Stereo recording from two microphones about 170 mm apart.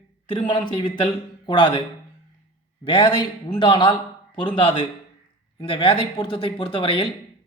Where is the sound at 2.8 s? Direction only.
25° left (ahead or behind).